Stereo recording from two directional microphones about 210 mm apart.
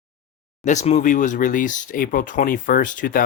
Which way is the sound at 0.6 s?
35° left (ahead or behind).